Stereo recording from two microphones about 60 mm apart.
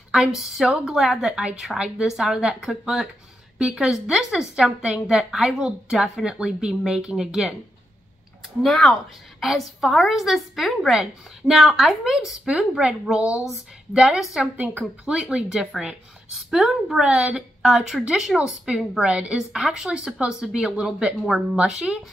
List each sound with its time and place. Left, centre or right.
0.1 s a woman's voice: centre
8.6 s a woman's voice: centre
13.9 s a woman's voice: centre
14.6 s speech: right
15.0 s a woman's voice: centre